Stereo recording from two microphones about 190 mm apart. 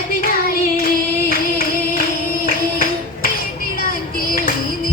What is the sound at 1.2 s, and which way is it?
Singing, 50° left (ahead or behind).